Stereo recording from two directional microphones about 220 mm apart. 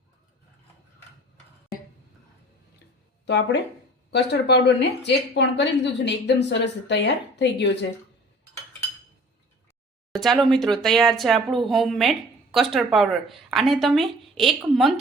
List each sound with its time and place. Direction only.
3.2 s a woman's voice: 50° left (ahead or behind)
10.1 s speech: centre (ahead or behind)